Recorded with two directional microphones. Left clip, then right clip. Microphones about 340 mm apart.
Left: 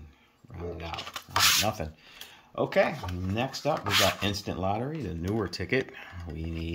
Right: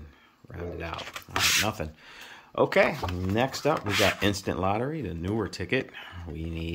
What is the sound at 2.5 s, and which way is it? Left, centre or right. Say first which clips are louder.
Speech: right 3 dB; centre.